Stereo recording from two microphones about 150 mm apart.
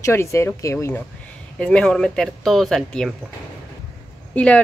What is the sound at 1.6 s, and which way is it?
Speech, 5° left (ahead or behind).